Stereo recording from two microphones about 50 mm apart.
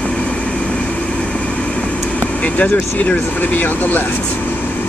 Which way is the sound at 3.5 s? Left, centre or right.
Left.